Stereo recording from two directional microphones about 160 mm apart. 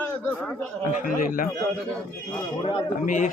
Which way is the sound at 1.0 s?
60° left (ahead or behind).